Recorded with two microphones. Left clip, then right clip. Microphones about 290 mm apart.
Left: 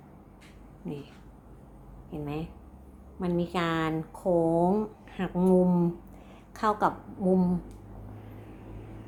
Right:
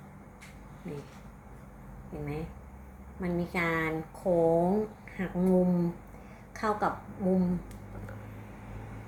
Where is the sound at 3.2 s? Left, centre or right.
Centre.